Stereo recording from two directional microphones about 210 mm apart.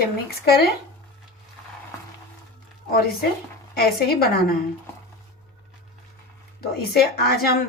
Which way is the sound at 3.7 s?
45° left (ahead or behind).